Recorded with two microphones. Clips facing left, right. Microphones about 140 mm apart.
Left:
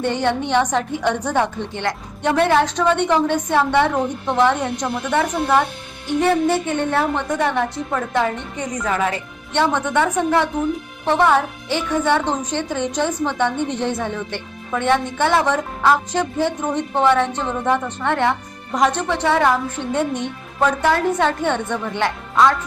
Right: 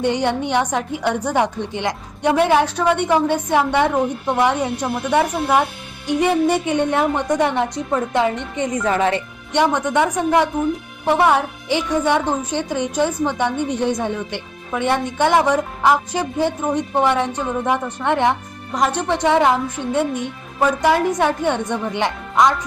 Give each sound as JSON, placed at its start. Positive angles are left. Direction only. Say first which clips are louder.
{"t": 0.0, "sound": "a woman's voice", "louder": "right 1 dB", "side_deg": -15}
{"t": 9.5, "sound": "speech", "louder": "right 1 dB", "side_deg": -10}